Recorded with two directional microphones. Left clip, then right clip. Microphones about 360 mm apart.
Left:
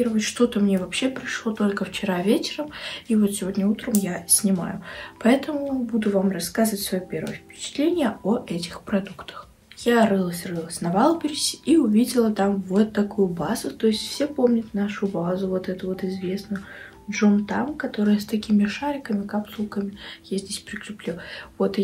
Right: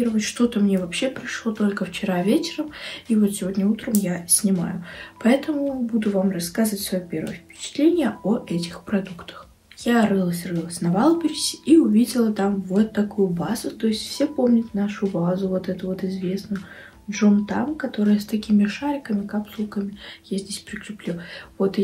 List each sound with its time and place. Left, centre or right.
0.0 s speech: centre